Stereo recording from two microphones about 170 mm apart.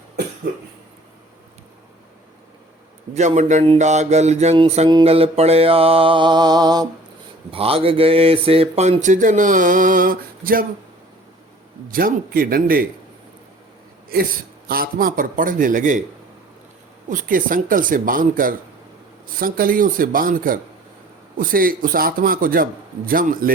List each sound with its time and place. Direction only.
3.2 s mantra: 45° right (ahead or behind); by 6.8 s 25° right (ahead or behind)
7.5 s speech: 35° right (ahead or behind); by 10.7 s 55° right (ahead or behind)
11.9 s a man's voice: 55° right (ahead or behind)
14.7 s speech: 60° right (ahead or behind)
17.1 s a man's voice: 50° right (ahead or behind)